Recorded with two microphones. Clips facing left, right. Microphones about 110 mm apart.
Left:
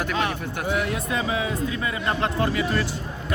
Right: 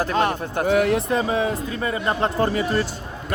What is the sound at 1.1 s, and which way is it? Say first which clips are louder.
Speech: right 4 dB; 40° right (ahead or behind).